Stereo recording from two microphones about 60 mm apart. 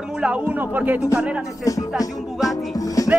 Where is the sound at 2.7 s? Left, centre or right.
Left.